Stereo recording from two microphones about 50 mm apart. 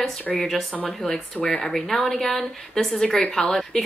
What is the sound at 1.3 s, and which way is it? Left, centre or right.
Speech, left.